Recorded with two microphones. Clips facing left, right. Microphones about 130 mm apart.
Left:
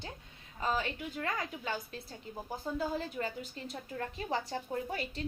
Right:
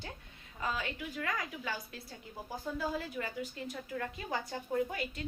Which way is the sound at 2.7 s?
30° left (ahead or behind).